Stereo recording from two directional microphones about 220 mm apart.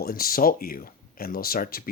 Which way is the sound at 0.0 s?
40° left (ahead or behind).